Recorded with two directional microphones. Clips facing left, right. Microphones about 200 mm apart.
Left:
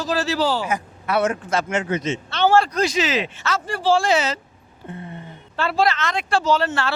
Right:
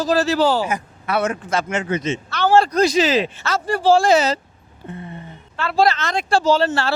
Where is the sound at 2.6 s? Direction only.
40° right (ahead or behind).